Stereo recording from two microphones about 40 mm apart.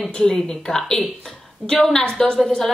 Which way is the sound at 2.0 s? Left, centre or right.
Centre.